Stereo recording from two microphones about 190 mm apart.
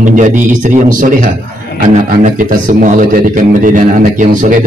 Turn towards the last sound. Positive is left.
turn(degrees=-40)  # may be behind; listen again after turning